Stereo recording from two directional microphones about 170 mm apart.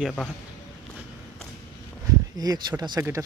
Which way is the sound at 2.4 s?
25° right (ahead or behind).